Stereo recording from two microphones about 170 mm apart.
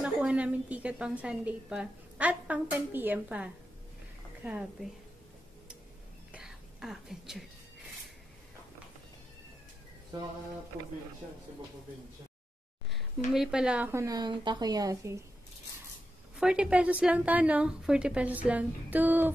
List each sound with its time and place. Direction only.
0.0 s a woman's voice: 5° right (ahead or behind)
6.3 s whispering: 5° right (ahead or behind)
12.9 s a woman's voice: 5° right (ahead or behind); by 15.2 s 20° right (ahead or behind)
16.3 s a woman's voice: 5° right (ahead or behind)